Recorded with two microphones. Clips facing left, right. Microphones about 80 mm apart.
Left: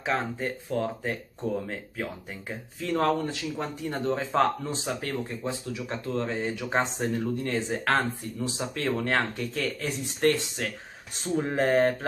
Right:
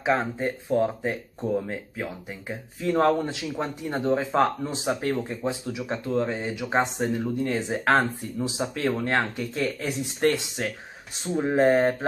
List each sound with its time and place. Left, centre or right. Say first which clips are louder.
0.0 s speech: right 4 dB; centre
1.7 s speech: right 2 dB; centre
9.6 s speech: right 4 dB; centre